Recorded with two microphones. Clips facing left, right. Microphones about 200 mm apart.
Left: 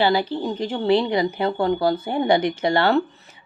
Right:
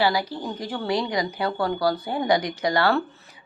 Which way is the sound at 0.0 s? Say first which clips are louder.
Left 4 dB; 25° left (ahead or behind).